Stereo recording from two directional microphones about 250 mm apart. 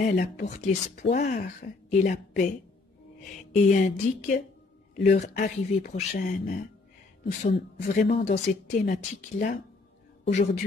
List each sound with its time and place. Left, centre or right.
0.1 s a woman's voice: left
8.0 s a woman's voice: left